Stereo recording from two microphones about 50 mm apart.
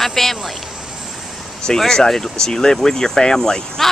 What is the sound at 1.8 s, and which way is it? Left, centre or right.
Speech, centre.